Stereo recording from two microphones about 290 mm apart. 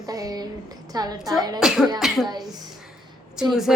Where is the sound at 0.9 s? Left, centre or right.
Centre.